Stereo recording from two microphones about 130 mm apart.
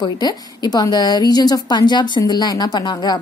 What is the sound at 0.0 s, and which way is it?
Speech, 30° left (ahead or behind).